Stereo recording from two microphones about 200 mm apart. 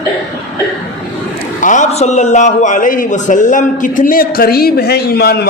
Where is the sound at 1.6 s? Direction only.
40° left (ahead or behind).